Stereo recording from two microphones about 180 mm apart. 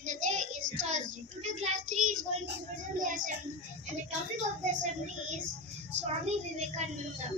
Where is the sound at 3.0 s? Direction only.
45° right (ahead or behind).